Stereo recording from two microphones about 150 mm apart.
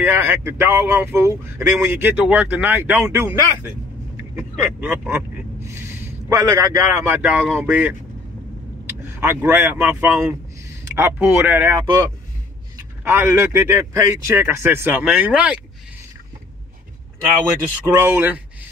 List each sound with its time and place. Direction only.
0.0 s speech: 15° right (ahead or behind)
7.2 s speech: 10° right (ahead or behind)
17.8 s speech: 20° right (ahead or behind)